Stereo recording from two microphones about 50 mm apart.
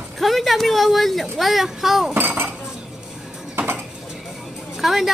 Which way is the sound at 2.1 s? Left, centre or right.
Right.